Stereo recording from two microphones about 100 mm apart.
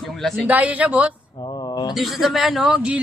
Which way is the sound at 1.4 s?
50° left (ahead or behind).